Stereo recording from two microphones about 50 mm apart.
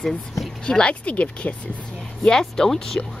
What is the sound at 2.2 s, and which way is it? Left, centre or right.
Speech, centre.